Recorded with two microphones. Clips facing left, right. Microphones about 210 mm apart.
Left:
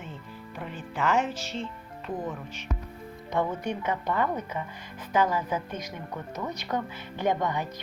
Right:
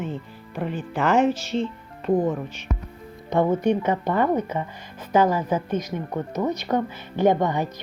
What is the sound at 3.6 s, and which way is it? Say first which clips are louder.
Speech: right 9 dB; 25° right (ahead or behind).